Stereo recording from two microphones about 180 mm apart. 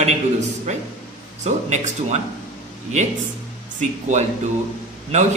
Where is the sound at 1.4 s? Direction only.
40° right (ahead or behind).